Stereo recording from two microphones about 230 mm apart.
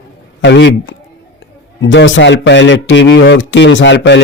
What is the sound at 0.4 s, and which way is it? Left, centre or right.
Speech, left.